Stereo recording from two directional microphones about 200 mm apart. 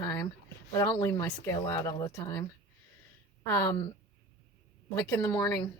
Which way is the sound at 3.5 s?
15° left (ahead or behind).